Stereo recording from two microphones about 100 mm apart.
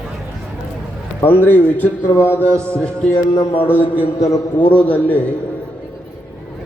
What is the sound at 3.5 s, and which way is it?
A man's voice, 20° left (ahead or behind).